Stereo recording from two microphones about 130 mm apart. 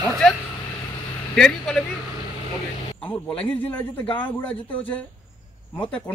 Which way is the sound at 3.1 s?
10° left (ahead or behind).